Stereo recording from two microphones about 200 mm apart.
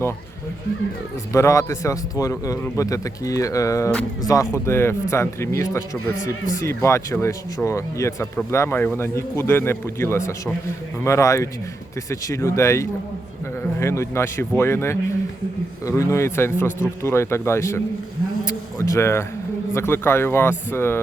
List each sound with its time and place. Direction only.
1.3 s speech: 15° left (ahead or behind)
18.4 s a sound: 15° left (ahead or behind)
19.7 s speech: 10° left (ahead or behind)